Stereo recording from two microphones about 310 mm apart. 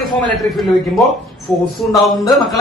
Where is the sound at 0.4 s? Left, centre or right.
Centre.